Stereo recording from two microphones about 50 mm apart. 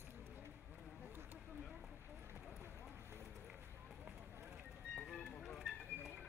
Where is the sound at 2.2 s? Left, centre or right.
Right.